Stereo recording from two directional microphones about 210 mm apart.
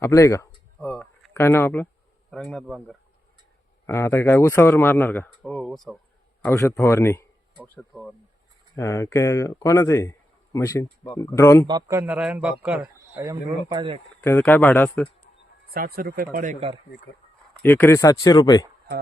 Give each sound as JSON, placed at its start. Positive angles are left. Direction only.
{"t": 0.0, "sound": "a sound", "side_deg": 15}
{"t": 2.3, "sound": "speech", "side_deg": 0}
{"t": 3.8, "sound": "speech", "side_deg": 10}
{"t": 6.4, "sound": "speech", "side_deg": 15}
{"t": 8.7, "sound": "speech", "side_deg": 15}
{"t": 11.6, "sound": "a man's voice", "side_deg": -15}
{"t": 14.2, "sound": "speech", "side_deg": 10}
{"t": 15.7, "sound": "speech", "side_deg": -45}
{"t": 17.6, "sound": "speech", "side_deg": 10}